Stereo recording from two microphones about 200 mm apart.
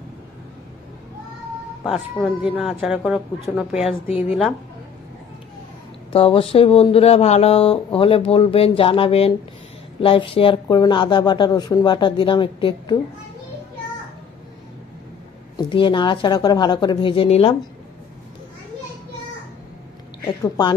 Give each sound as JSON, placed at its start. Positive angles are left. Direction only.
{"t": 2.2, "sound": "speech", "side_deg": -5}
{"t": 6.1, "sound": "speech", "side_deg": 30}
{"t": 15.5, "sound": "speech", "side_deg": 25}
{"t": 20.2, "sound": "speech", "side_deg": 20}